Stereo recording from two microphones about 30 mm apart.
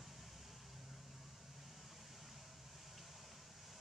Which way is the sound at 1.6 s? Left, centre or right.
Centre.